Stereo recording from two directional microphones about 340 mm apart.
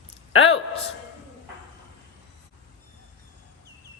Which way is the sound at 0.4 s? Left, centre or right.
Centre.